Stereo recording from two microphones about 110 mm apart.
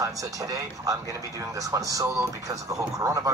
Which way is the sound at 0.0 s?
30° right (ahead or behind).